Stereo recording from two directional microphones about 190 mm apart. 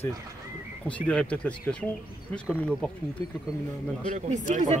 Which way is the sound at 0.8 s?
5° left (ahead or behind).